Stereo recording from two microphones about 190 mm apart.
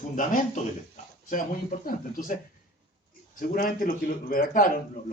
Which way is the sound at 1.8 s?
45° left (ahead or behind).